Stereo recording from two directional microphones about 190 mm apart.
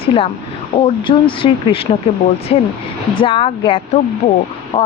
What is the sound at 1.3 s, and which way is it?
A woman's voice, 30° left (ahead or behind).